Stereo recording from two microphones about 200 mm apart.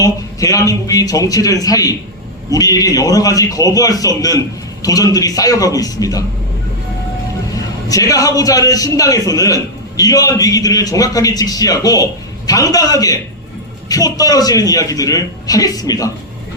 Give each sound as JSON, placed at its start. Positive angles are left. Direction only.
{"t": 0.0, "sound": "a man's voice", "side_deg": 15}
{"t": 7.9, "sound": "a man's voice", "side_deg": 15}